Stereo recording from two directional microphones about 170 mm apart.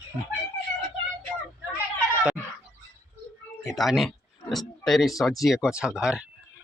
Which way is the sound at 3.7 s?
Centre (ahead or behind).